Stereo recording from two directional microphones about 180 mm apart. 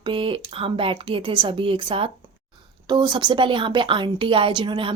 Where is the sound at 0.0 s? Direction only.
30° right (ahead or behind).